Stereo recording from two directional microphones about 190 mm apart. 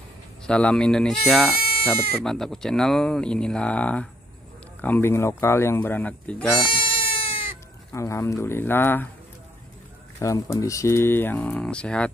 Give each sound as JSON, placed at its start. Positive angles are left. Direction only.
{"t": 0.5, "sound": "speech", "side_deg": 5}
{"t": 6.7, "sound": "goat", "side_deg": 25}
{"t": 7.9, "sound": "speech", "side_deg": 15}
{"t": 10.1, "sound": "speech", "side_deg": 15}